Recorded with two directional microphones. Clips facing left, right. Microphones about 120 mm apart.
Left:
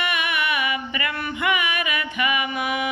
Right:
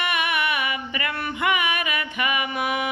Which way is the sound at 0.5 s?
40° right (ahead or behind).